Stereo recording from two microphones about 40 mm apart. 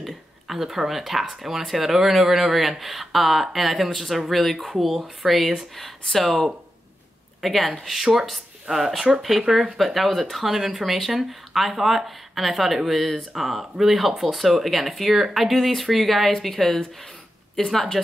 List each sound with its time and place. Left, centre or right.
0.0 s speech: centre